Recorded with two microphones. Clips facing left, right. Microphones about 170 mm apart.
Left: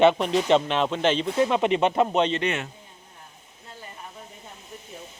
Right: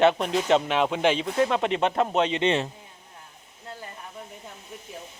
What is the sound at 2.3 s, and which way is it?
Speech, 25° right (ahead or behind).